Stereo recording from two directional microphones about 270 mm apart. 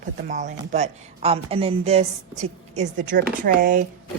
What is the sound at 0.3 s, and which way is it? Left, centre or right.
Speech, right.